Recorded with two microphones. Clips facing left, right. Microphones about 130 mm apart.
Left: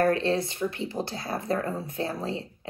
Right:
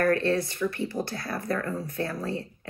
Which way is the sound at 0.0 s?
25° left (ahead or behind).